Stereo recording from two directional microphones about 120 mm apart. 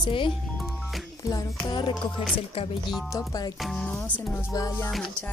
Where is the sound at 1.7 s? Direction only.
40° left (ahead or behind).